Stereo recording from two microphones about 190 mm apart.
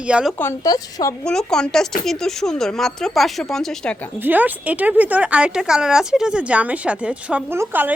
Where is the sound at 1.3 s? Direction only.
5° left (ahead or behind).